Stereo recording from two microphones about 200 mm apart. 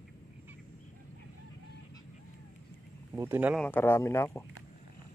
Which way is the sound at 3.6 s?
10° left (ahead or behind).